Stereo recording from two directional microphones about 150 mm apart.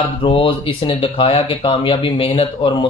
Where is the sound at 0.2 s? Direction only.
35° left (ahead or behind).